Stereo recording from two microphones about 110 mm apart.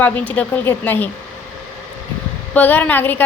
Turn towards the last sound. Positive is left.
turn(degrees=15)  # may be behind; listen again after turning